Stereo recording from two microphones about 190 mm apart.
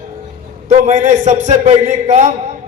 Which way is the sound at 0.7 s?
40° right (ahead or behind).